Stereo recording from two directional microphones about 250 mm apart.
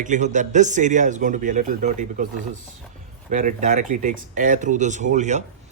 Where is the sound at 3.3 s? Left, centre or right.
Right.